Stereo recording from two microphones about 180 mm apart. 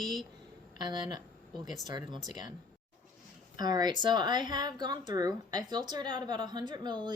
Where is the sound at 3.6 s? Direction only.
25° right (ahead or behind).